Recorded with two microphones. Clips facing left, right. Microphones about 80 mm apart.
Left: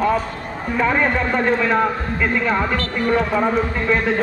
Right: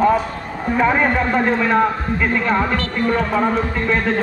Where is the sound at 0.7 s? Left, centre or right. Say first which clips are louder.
Right 2 dB; centre.